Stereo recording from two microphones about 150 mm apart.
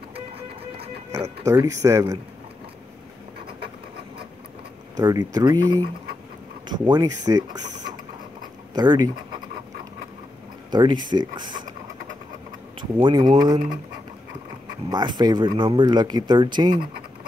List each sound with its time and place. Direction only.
1.1 s speech: 20° right (ahead or behind)
4.9 s speech: 25° right (ahead or behind)
8.7 s speech: 30° right (ahead or behind)
10.7 s speech: 30° right (ahead or behind)
13.0 s speech: 30° right (ahead or behind)
14.9 s speech: 25° right (ahead or behind)